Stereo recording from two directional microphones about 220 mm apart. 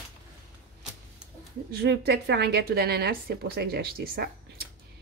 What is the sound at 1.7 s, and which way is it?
Speech, 45° right (ahead or behind).